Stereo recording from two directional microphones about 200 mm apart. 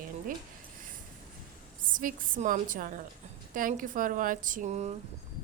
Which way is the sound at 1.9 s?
40° right (ahead or behind).